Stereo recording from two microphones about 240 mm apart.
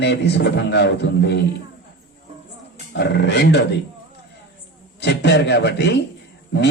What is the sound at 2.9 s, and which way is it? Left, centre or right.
Speech, left.